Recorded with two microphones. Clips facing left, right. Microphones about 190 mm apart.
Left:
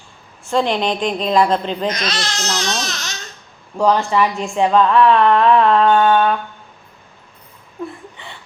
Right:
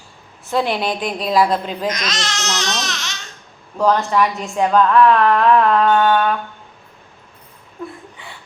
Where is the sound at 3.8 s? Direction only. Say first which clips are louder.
Left 1 dB; 10° left (ahead or behind).